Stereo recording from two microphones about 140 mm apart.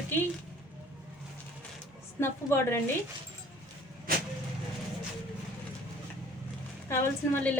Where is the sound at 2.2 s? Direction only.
20° left (ahead or behind).